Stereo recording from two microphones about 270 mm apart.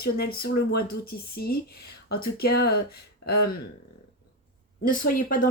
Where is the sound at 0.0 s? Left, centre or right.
Left.